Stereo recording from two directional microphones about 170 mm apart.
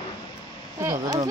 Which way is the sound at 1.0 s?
20° right (ahead or behind).